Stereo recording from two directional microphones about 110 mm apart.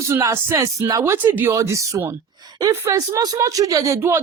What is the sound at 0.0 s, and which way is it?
Speech, 30° right (ahead or behind).